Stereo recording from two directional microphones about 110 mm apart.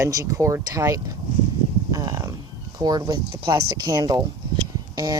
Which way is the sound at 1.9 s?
30° right (ahead or behind).